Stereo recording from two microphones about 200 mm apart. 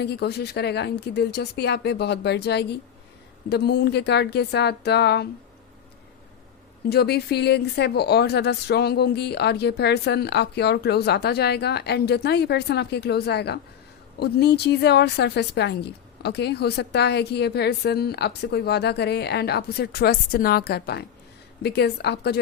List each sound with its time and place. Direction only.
0.0 s speech: 55° left (ahead or behind)
6.8 s speech: 55° left (ahead or behind)